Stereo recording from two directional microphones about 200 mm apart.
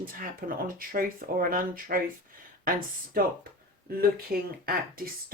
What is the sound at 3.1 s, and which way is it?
Speech, 50° right (ahead or behind).